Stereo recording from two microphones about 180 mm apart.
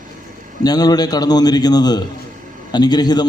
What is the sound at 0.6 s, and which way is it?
A man's voice, 20° left (ahead or behind).